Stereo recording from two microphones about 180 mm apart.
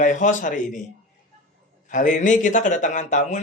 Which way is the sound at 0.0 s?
45° left (ahead or behind).